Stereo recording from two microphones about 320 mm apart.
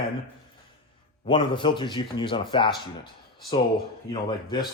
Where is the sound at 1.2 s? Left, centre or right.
Centre.